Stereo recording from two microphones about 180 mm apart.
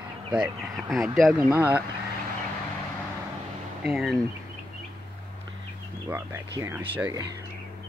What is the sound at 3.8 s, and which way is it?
Speech, centre (ahead or behind).